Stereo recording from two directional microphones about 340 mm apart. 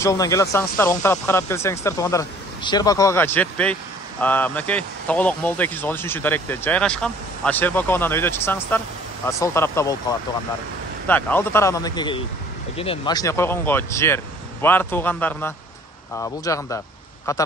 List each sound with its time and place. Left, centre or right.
0.0 s speech: centre
11.1 s speech: centre